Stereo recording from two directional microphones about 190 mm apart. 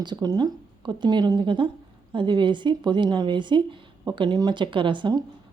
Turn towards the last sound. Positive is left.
turn(degrees=-25)  # may be behind; listen again after turning